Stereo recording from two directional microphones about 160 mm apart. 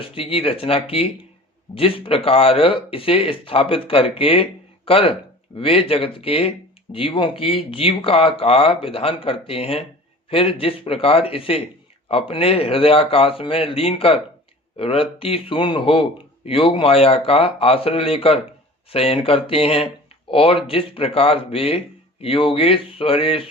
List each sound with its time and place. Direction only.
0.0 s a man's voice: 35° left (ahead or behind)